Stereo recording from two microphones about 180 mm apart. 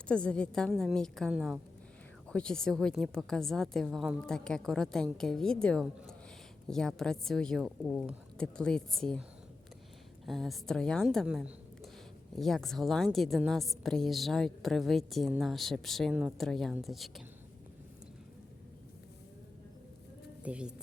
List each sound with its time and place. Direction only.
0.1 s a woman's voice: 5° left (ahead or behind)
10.2 s a woman's voice: centre (ahead or behind)
20.4 s speech: 5° right (ahead or behind)